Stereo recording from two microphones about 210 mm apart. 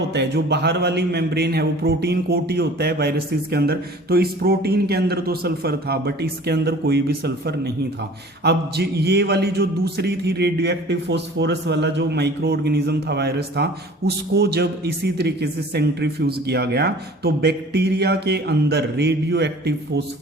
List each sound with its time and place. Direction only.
0.1 s a man's voice: 55° right (ahead or behind)